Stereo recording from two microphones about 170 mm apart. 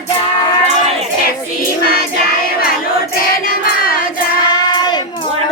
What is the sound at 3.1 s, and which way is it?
Music, 55° left (ahead or behind).